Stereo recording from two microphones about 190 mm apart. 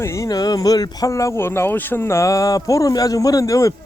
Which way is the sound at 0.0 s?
15° left (ahead or behind).